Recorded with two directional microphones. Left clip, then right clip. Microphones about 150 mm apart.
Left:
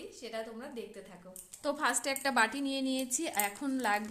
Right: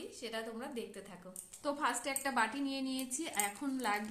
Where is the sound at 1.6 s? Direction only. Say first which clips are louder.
Left 4 dB; 70° left (ahead or behind).